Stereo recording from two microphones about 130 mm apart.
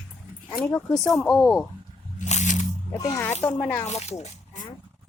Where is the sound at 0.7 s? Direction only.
25° left (ahead or behind).